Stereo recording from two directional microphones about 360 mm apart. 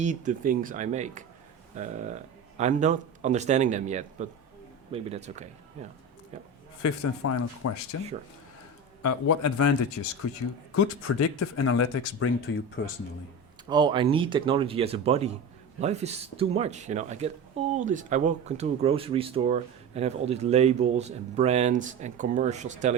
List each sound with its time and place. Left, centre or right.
0.0 s a man's voice: centre
6.8 s speech: left
11.3 s speech: left
13.7 s speech: centre